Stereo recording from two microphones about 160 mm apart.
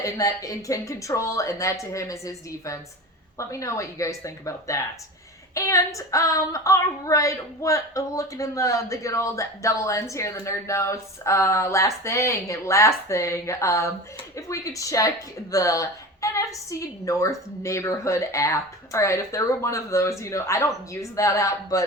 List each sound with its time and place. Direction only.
0.0 s female singing: 20° left (ahead or behind)